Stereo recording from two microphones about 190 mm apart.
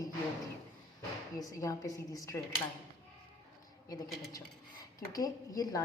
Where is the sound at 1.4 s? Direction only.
15° left (ahead or behind).